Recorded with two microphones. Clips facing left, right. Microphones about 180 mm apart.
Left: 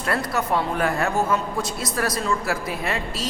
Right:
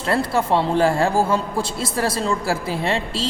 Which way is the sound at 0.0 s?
25° right (ahead or behind).